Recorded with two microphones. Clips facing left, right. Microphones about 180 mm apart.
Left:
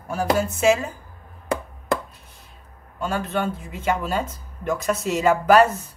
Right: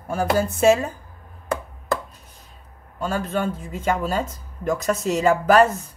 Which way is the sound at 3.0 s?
40° right (ahead or behind).